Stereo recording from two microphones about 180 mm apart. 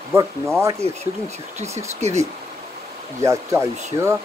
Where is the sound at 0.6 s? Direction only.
15° right (ahead or behind).